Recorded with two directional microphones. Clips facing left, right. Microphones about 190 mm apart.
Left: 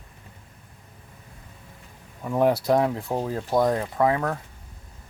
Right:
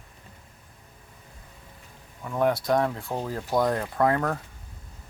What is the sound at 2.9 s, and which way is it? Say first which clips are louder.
Speech: left 4 dB; 20° left (ahead or behind).